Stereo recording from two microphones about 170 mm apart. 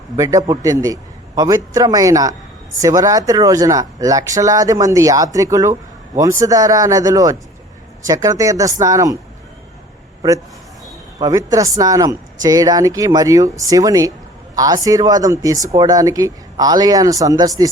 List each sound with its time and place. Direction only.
0.2 s speech: 20° right (ahead or behind)
11.2 s speech: 20° right (ahead or behind)